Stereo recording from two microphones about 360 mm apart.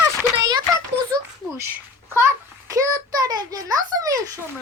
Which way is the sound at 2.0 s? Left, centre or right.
Centre.